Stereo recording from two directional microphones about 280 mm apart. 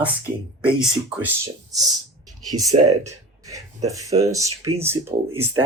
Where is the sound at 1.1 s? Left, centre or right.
Centre.